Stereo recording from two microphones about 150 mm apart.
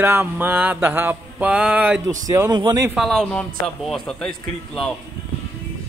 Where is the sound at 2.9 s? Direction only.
Centre (ahead or behind).